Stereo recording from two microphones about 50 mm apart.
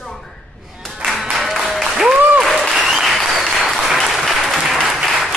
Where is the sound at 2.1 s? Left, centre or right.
Right.